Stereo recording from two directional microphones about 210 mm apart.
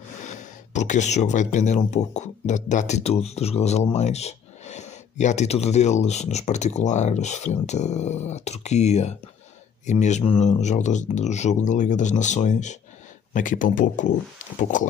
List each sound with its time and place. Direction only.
0.2 s speech: 35° left (ahead or behind)